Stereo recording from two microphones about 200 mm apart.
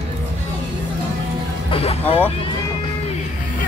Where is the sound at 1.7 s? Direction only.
30° left (ahead or behind).